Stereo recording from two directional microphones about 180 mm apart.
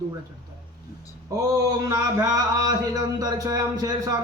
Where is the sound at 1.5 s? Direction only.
20° right (ahead or behind).